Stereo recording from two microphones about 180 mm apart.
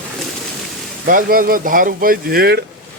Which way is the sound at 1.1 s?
50° right (ahead or behind).